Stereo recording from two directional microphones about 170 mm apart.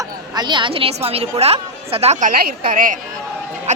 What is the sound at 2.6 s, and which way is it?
A woman's voice, 55° right (ahead or behind).